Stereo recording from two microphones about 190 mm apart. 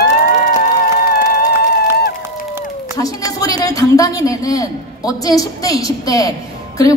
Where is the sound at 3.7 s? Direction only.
15° left (ahead or behind).